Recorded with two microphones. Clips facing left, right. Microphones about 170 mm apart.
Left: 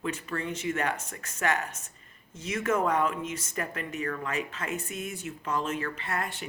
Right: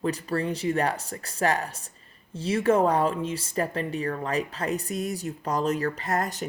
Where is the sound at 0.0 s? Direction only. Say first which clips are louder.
Right 6 dB; 35° right (ahead or behind).